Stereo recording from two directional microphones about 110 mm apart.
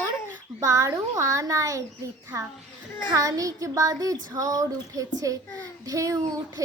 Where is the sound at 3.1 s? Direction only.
30° right (ahead or behind).